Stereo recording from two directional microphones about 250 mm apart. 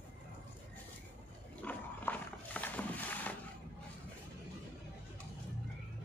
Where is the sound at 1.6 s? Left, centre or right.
Centre.